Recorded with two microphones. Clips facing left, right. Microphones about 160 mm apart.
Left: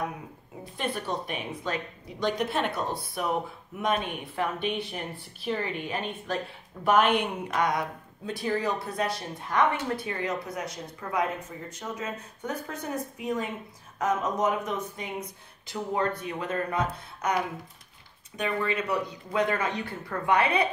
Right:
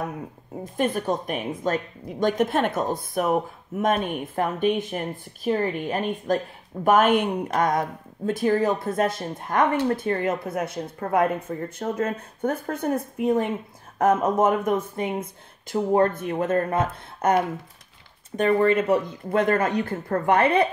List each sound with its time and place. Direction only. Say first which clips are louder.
0.7 s a woman's voice: right 7 dB; 45° right (ahead or behind)